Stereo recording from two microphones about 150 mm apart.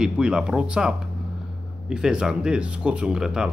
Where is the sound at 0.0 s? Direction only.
5° right (ahead or behind).